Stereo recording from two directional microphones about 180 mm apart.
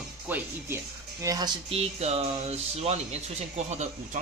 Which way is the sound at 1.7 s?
35° right (ahead or behind).